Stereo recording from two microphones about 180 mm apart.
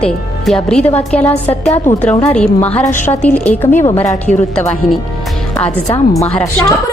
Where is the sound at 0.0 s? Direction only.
Centre (ahead or behind).